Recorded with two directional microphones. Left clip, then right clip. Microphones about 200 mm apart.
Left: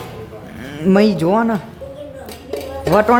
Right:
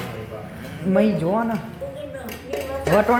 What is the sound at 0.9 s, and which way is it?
Speech, 35° left (ahead or behind).